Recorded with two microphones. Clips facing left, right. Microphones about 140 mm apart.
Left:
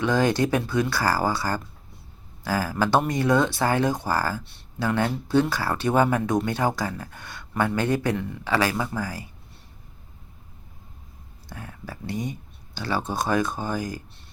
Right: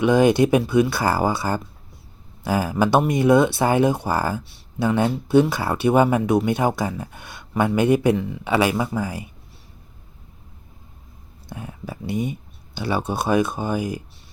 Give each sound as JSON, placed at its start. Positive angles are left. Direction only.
{"t": 0.0, "sound": "speech", "side_deg": -15}
{"t": 11.4, "sound": "speech", "side_deg": -15}